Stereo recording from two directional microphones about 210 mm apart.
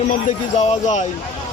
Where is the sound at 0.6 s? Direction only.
35° left (ahead or behind).